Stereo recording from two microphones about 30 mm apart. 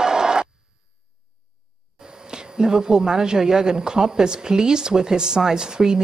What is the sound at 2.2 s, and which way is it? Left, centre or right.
A woman's voice, right.